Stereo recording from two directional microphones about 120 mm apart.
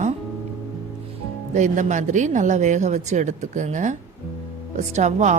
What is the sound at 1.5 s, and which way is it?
Speech, 90° right.